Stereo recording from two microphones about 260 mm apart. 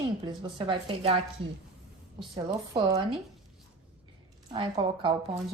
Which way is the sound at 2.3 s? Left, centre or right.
Centre.